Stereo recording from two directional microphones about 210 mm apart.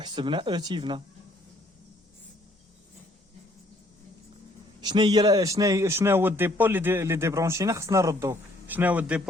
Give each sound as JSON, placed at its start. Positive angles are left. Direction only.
{"t": 0.0, "sound": "speech", "side_deg": -20}
{"t": 4.8, "sound": "a man's voice", "side_deg": -20}